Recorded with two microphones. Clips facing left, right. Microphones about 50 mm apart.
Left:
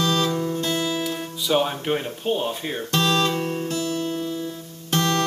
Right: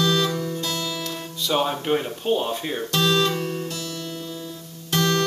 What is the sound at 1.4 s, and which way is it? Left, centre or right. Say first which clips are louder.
Speech: left 1 dB; centre.